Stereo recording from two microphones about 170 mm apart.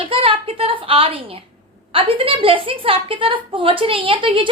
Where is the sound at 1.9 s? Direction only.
30° right (ahead or behind).